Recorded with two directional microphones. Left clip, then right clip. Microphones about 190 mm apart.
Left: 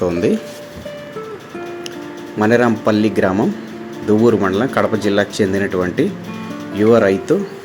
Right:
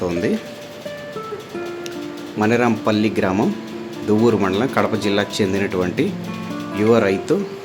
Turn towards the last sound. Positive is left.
turn(degrees=5)  # may be behind; listen again after turning